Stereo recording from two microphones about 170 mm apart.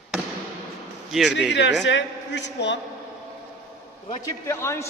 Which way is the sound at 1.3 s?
90° left.